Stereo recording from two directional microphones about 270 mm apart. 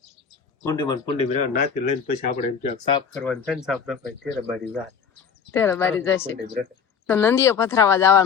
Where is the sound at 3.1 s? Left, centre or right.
Centre.